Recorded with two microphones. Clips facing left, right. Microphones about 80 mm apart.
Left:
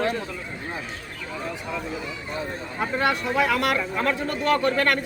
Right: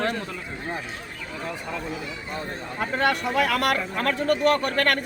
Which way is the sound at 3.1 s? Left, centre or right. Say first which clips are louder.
Even; right.